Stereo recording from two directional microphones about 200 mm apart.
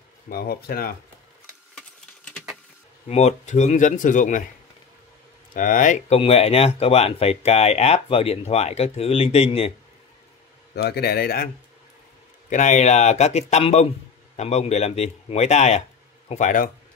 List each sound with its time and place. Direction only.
0.3 s a man's voice: 50° left (ahead or behind)
1.8 s a sound: 5° left (ahead or behind)
3.1 s speech: 35° left (ahead or behind)
5.5 s speech: 40° left (ahead or behind)
10.8 s a man's voice: 50° left (ahead or behind)
12.4 s speech: 40° left (ahead or behind)